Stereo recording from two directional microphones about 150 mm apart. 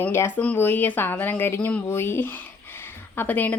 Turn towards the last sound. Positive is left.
turn(degrees=10)  # may be behind; listen again after turning